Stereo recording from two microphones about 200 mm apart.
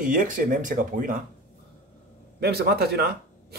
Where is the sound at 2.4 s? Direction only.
55° right (ahead or behind).